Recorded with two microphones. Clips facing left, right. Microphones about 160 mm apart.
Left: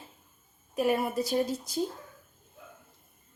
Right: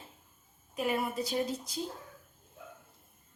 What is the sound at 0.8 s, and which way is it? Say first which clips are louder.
Speech: left 5 dB; 45° left (ahead or behind).